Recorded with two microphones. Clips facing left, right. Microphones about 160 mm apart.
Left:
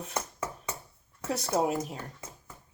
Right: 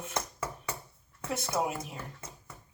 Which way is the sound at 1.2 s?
35° left (ahead or behind).